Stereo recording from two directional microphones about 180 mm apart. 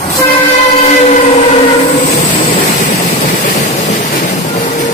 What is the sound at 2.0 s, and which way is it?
Train, 40° left (ahead or behind).